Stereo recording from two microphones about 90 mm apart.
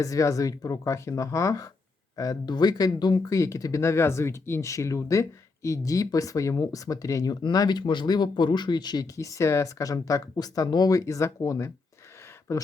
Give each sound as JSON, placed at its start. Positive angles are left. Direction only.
{"t": 0.0, "sound": "speech", "side_deg": 40}
{"t": 9.1, "sound": "speech", "side_deg": 35}